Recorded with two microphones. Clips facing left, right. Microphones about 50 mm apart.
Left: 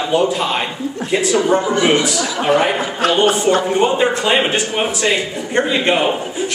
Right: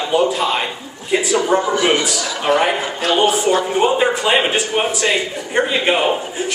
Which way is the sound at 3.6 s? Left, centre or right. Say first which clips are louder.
Left 1 dB; centre.